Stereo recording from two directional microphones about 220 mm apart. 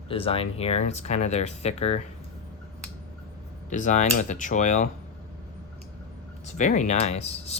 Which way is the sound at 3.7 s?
35° left (ahead or behind).